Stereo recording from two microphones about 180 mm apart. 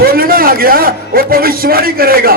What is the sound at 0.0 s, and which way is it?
A man's voice, 55° right (ahead or behind).